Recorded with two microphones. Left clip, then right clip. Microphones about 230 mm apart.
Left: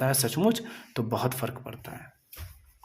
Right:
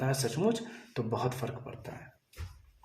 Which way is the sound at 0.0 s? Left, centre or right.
Left.